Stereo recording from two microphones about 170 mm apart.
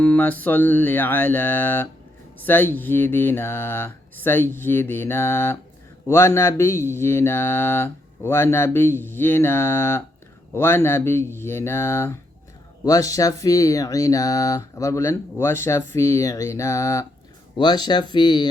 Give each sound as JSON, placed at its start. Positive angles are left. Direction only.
{"t": 0.0, "sound": "speech", "side_deg": 10}